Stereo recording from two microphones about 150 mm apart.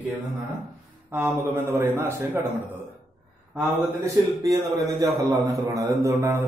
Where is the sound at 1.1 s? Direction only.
15° right (ahead or behind).